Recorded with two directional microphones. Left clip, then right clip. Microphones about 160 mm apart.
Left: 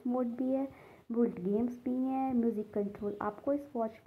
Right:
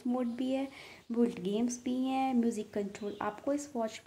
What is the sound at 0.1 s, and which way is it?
Speech, 10° right (ahead or behind).